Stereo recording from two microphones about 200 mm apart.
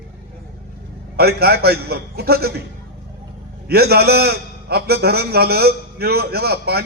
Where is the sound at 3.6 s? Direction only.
50° right (ahead or behind).